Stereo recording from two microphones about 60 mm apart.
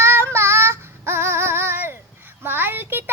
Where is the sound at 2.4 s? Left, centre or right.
Right.